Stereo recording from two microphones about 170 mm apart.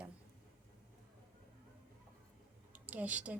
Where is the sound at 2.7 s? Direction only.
10° right (ahead or behind).